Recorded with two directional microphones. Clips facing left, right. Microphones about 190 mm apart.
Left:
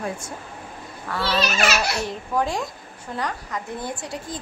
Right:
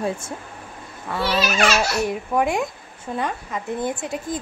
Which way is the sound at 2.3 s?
20° right (ahead or behind).